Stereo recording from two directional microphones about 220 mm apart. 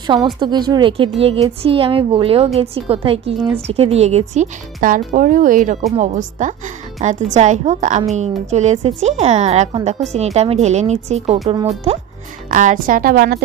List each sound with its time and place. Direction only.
0.0 s a woman's voice: 20° right (ahead or behind)
12.4 s speech: 35° right (ahead or behind)